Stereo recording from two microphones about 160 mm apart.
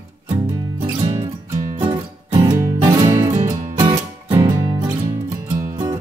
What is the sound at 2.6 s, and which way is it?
Music, 20° right (ahead or behind).